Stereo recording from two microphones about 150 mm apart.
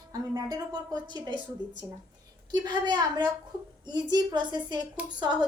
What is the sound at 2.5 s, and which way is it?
A woman's voice, 30° right (ahead or behind).